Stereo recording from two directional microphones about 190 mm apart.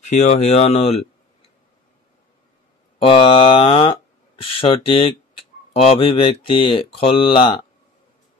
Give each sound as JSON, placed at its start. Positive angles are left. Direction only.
{"t": 0.0, "sound": "speech", "side_deg": 35}
{"t": 3.1, "sound": "speech", "side_deg": 25}